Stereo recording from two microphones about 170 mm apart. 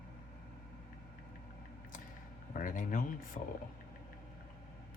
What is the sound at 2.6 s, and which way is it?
Speech, 50° left (ahead or behind).